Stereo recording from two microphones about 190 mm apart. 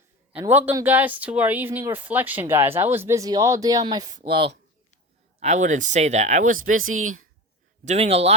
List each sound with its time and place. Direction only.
0.3 s speech: 10° right (ahead or behind); by 4.5 s 30° right (ahead or behind)
5.4 s speech: 40° right (ahead or behind)
6.9 s speech: 90° right
7.9 s speech: 35° right (ahead or behind)